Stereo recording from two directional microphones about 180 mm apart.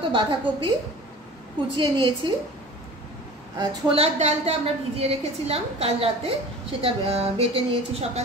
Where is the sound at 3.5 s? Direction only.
35° right (ahead or behind).